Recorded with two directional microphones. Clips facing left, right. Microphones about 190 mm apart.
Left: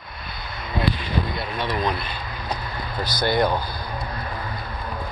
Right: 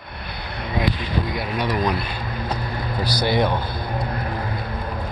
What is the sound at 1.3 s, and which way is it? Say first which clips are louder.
Speech: right 3 dB; 15° right (ahead or behind).